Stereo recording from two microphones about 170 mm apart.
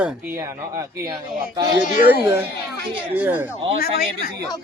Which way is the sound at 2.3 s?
15° right (ahead or behind).